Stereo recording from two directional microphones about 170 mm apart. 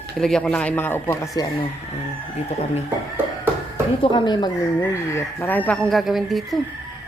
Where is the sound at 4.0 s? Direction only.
30° left (ahead or behind); by 6.5 s centre (ahead or behind).